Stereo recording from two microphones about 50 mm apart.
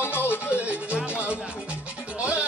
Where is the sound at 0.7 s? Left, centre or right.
Right.